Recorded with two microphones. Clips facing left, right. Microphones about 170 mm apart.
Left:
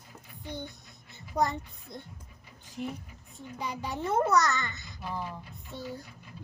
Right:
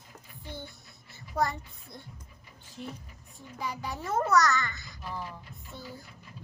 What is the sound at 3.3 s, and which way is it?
A child's voice, 20° left (ahead or behind).